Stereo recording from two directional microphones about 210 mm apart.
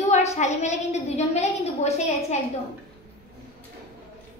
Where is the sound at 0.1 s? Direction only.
35° left (ahead or behind).